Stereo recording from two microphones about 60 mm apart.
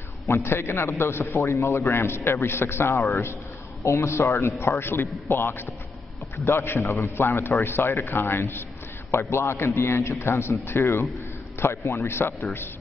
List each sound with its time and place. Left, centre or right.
0.3 s a man's voice: left